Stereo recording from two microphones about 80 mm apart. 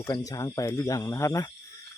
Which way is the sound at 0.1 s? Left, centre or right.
Left.